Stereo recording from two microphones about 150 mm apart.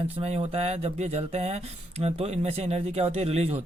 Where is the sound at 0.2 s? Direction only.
40° right (ahead or behind).